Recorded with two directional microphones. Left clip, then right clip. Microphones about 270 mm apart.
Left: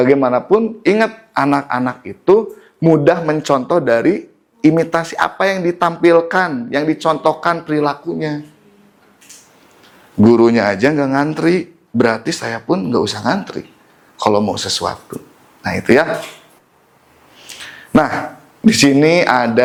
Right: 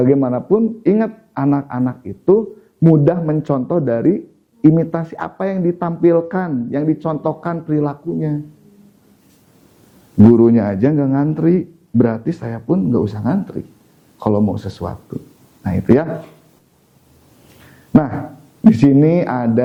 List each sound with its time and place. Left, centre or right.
0.0 s speech: centre
0.4 s speech: centre
0.8 s speech: centre
2.2 s speech: left
2.9 s speech: centre
10.3 s speech: centre
14.9 s speech: centre
17.5 s speech: centre